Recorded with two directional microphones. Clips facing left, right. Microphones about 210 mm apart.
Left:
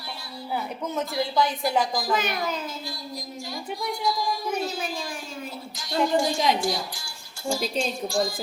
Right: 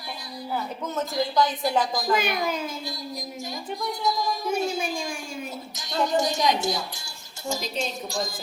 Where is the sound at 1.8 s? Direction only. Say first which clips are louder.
Even; 20° right (ahead or behind).